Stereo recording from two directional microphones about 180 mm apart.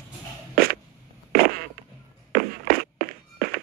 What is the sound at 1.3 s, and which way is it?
Fart, 55° right (ahead or behind).